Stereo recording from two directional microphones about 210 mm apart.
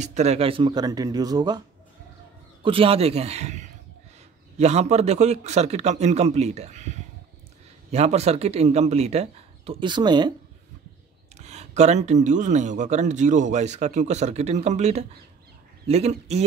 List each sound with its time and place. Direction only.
0.0 s speech: 35° right (ahead or behind)
2.6 s speech: 25° right (ahead or behind)
11.3 s speech: 30° right (ahead or behind)